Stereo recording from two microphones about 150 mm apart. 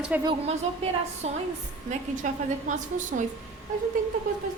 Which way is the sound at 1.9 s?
55° right (ahead or behind).